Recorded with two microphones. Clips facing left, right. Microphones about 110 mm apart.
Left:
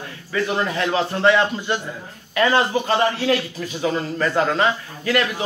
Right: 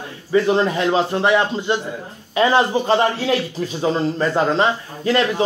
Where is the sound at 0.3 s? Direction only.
20° right (ahead or behind).